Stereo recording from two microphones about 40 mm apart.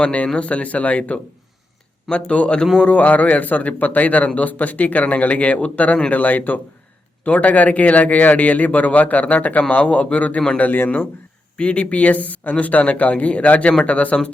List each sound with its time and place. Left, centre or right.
0.0 s a man's voice: left
10.6 s speech: left
11.5 s a man's voice: left